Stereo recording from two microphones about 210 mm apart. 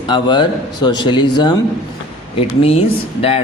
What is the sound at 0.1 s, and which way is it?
Speech, 20° left (ahead or behind).